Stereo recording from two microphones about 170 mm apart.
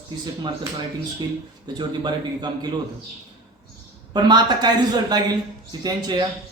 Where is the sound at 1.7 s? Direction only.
25° right (ahead or behind).